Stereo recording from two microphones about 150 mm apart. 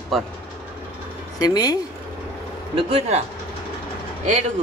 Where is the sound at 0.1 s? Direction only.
Centre (ahead or behind).